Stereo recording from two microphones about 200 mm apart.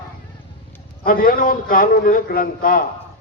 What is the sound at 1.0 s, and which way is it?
A man's voice, 45° left (ahead or behind).